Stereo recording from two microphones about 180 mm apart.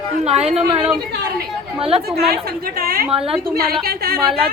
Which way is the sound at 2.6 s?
55° right (ahead or behind).